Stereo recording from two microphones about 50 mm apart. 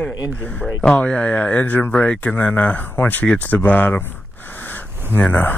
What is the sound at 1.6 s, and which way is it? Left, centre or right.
Speech, left.